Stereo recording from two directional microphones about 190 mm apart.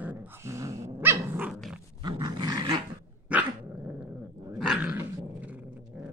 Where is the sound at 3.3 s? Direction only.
10° right (ahead or behind).